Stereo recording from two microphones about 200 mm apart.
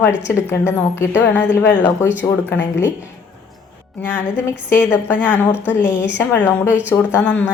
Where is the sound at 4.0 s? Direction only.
10° left (ahead or behind).